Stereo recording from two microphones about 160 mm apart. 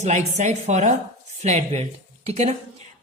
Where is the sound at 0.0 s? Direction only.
45° right (ahead or behind).